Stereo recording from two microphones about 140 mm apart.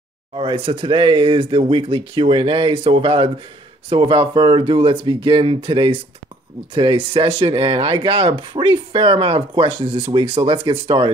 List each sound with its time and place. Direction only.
0.4 s speech: 40° right (ahead or behind)